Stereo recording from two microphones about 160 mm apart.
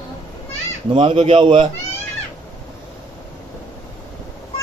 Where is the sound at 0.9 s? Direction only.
35° right (ahead or behind).